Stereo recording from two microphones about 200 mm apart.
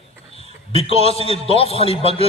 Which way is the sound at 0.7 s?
30° left (ahead or behind).